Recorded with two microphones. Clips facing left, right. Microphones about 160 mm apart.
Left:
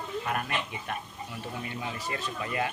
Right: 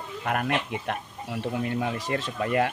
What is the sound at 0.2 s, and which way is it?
Speech, 65° right (ahead or behind).